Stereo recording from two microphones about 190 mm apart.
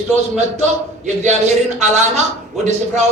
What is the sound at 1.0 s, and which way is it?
Speech, 35° right (ahead or behind).